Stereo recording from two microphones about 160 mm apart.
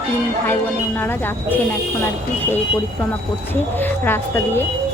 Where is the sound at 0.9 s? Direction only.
10° left (ahead or behind).